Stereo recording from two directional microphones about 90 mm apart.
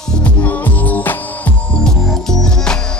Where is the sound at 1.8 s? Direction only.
5° left (ahead or behind).